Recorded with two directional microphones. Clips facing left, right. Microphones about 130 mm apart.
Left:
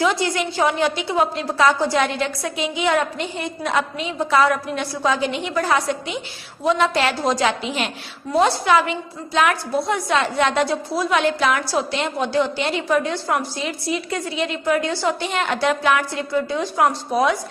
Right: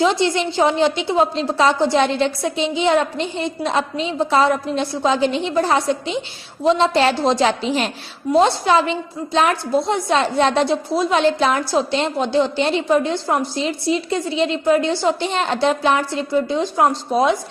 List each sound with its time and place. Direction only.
0.0 s a woman's voice: 25° right (ahead or behind)